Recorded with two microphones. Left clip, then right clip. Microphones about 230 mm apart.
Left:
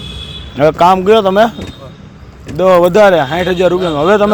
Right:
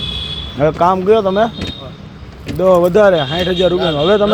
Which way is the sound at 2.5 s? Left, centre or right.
Left.